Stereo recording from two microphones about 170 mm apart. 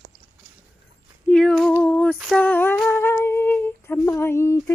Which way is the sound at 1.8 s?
5° left (ahead or behind).